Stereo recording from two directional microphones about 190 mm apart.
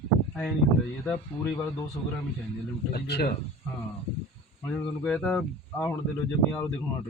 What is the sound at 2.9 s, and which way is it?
Speech, 60° left (ahead or behind).